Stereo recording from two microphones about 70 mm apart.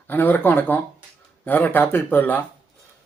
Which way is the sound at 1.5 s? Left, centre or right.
Left.